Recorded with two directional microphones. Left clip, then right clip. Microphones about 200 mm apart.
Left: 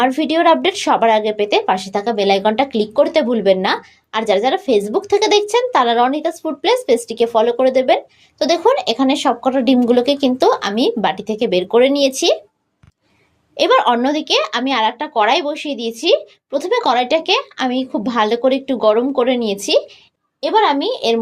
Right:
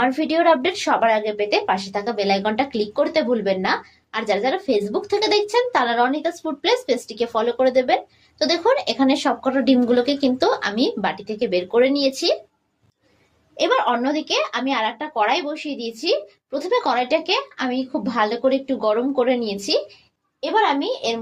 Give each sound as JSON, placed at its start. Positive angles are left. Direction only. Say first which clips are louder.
{"t": 0.0, "sound": "a woman's voice", "louder": "left 4 dB", "side_deg": 35}
{"t": 13.6, "sound": "a woman's voice", "louder": "left 6 dB", "side_deg": 45}